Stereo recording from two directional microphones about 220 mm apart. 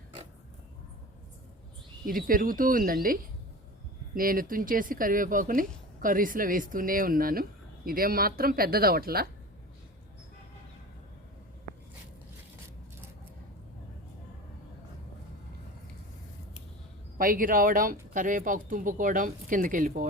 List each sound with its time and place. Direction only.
2.0 s speech: 40° right (ahead or behind)
17.2 s speech: 40° right (ahead or behind)